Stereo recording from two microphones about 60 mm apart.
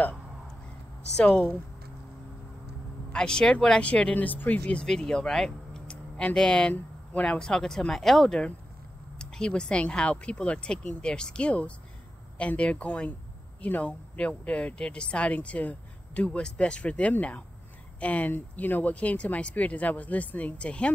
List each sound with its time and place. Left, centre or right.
1.2 s speech: centre
3.1 s speech: centre
4.8 s speech: centre; by 15.7 s left
16.3 s speech: centre